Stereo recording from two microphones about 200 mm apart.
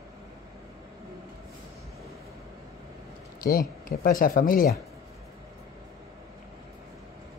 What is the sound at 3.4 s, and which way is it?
Speech, 45° left (ahead or behind).